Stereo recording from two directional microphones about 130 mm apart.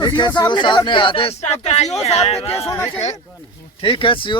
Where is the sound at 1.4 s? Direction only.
55° left (ahead or behind).